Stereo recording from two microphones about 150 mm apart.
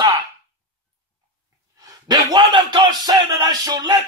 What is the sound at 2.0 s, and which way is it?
Speech, 30° right (ahead or behind).